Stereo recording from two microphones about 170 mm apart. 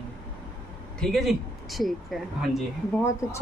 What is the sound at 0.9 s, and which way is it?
Speech, centre (ahead or behind).